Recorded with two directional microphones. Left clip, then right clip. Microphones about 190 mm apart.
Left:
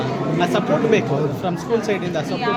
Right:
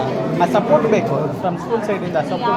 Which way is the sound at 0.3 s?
25° left (ahead or behind).